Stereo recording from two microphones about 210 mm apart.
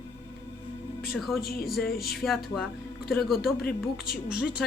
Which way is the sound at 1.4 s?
45° left (ahead or behind).